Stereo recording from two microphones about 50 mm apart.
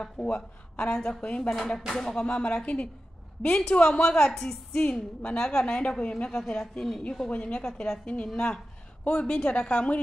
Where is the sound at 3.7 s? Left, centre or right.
Left.